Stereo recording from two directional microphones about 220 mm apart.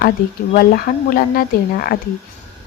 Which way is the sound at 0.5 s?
40° left (ahead or behind).